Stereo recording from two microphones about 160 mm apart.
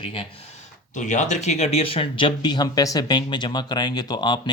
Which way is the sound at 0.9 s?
50° left (ahead or behind).